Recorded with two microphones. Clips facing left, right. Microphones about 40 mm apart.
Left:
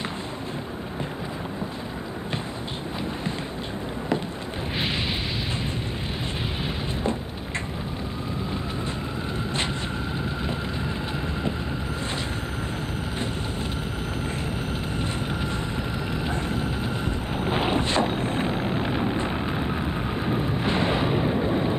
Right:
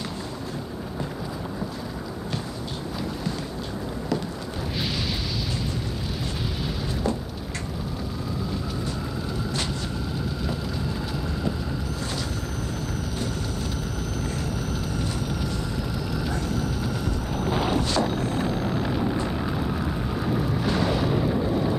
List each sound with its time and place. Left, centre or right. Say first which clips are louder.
16.3 s boat: left 1 dB; left